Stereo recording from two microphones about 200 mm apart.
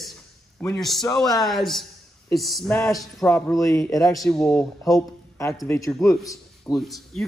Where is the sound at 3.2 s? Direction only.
15° left (ahead or behind).